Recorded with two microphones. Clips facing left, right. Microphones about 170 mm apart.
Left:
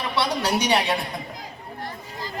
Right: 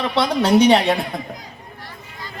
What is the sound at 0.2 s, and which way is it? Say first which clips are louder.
Speech: right 9 dB; 55° right (ahead or behind).